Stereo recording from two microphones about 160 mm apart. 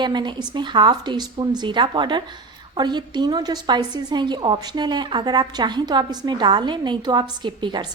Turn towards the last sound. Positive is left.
turn(degrees=-30)  # may be behind; listen again after turning